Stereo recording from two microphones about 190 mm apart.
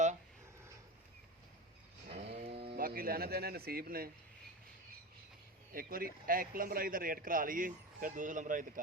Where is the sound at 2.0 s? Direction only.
35° right (ahead or behind).